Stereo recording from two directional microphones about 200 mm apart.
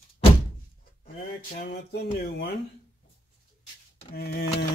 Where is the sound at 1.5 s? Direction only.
50° left (ahead or behind).